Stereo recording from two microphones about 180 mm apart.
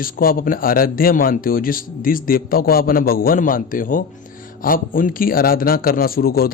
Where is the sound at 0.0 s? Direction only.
55° left (ahead or behind).